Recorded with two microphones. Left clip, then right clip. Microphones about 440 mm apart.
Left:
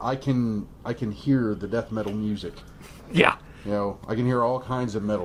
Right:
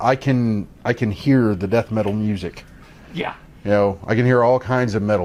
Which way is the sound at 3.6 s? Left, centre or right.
Right.